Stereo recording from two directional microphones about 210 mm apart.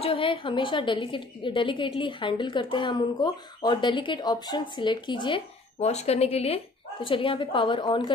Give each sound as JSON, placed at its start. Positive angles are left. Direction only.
{"t": 0.0, "sound": "a woman's voice", "side_deg": 25}